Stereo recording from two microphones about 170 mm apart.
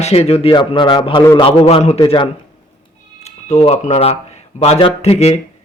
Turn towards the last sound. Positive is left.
turn(degrees=40)  # may be behind; listen again after turning